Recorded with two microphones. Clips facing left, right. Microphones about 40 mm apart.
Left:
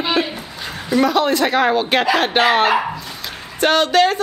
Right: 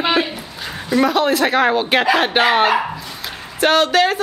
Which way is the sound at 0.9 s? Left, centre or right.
Centre.